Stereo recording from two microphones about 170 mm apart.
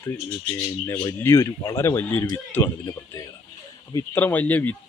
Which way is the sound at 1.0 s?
15° left (ahead or behind).